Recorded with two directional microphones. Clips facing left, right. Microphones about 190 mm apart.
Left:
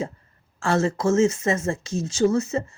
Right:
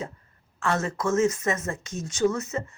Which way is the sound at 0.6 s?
30° left (ahead or behind).